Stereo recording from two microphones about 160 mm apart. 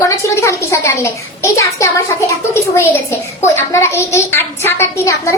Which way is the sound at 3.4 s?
15° left (ahead or behind).